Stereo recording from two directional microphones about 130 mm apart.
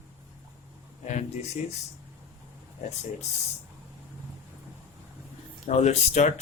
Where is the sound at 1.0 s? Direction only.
65° left (ahead or behind).